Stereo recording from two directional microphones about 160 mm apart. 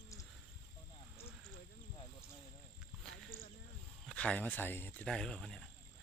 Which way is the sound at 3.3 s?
20° right (ahead or behind).